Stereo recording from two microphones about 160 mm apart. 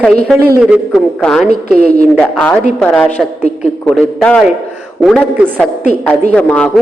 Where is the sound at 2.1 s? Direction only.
5° left (ahead or behind).